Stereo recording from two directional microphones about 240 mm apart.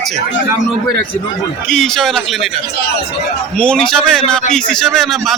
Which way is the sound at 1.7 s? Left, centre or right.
Centre.